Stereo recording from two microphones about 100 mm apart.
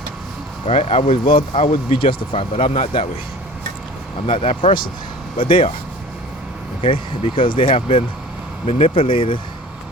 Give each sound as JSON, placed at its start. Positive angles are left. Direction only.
{"t": 0.7, "sound": "speech", "side_deg": 90}
{"t": 4.3, "sound": "speech", "side_deg": 70}
{"t": 6.8, "sound": "speech", "side_deg": 60}